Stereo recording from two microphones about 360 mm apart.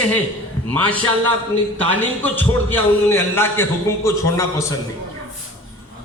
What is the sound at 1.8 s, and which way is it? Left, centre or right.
A man's voice, centre.